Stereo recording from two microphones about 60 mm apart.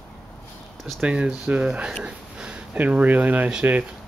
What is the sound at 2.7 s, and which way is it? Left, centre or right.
Speech, right.